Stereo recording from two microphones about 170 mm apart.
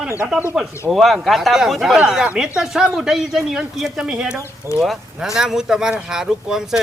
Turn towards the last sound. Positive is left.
turn(degrees=-5)  # may be behind; listen again after turning